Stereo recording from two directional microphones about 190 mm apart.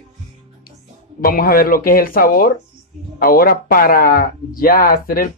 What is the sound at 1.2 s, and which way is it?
Speech, 50° left (ahead or behind).